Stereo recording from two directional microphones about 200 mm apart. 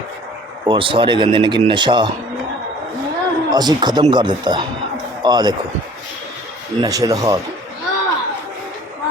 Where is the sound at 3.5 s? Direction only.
20° right (ahead or behind).